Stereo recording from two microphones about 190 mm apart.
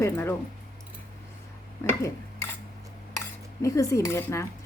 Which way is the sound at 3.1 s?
15° left (ahead or behind).